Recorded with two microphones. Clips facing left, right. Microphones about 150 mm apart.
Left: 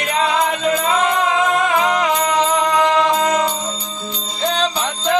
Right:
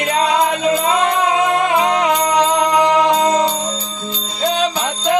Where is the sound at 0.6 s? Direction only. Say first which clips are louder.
Right 2 dB; 20° right (ahead or behind).